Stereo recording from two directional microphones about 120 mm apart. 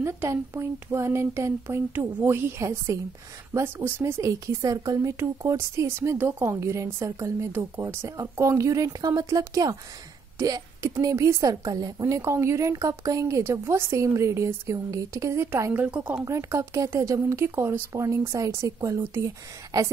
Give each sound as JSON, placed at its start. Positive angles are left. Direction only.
{"t": 0.0, "sound": "speech", "side_deg": -25}
{"t": 16.3, "sound": "speech", "side_deg": -25}